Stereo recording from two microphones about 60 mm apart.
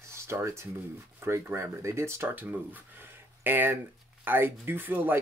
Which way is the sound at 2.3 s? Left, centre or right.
Right.